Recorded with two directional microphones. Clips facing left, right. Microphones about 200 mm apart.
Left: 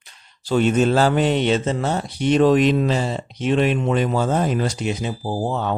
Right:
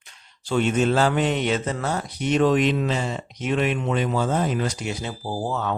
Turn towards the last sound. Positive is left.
turn(degrees=25)  # may be behind; listen again after turning